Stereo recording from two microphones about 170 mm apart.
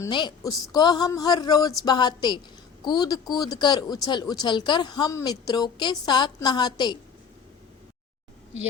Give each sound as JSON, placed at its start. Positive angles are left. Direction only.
{"t": 0.1, "sound": "speech", "side_deg": 25}